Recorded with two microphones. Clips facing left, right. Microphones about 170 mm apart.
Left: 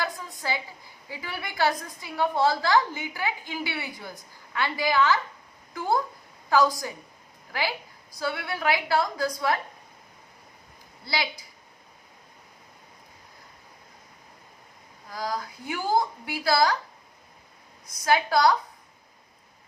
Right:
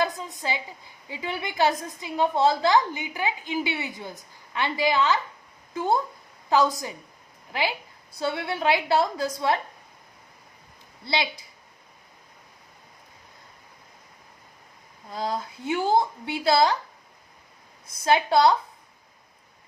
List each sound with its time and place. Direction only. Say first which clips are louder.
0.0 s a woman's voice: right 5 dB; 20° right (ahead or behind)
11.0 s a woman's voice: right 3 dB; 25° right (ahead or behind)
15.1 s a woman's voice: right 2 dB; 25° right (ahead or behind)
17.8 s a woman's voice: right 2 dB; 25° right (ahead or behind)